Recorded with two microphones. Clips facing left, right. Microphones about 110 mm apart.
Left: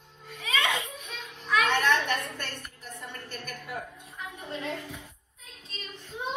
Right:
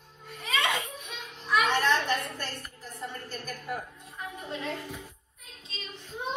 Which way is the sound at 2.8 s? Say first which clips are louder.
Right 3 dB; 65° left (ahead or behind).